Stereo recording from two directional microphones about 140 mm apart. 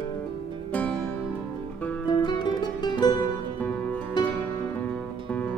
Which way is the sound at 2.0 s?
30° left (ahead or behind).